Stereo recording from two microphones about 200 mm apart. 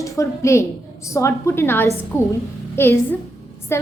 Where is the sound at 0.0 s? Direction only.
15° left (ahead or behind).